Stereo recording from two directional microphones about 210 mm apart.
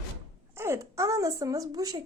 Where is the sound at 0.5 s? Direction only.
10° right (ahead or behind).